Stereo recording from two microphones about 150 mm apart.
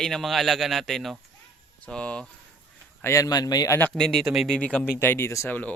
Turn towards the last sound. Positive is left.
turn(degrees=10)  # may be behind; listen again after turning